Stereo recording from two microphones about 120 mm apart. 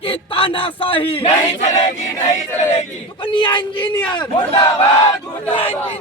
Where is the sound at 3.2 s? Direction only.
40° left (ahead or behind).